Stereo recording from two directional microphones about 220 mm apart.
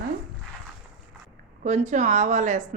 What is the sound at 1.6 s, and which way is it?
A woman's voice, 35° right (ahead or behind).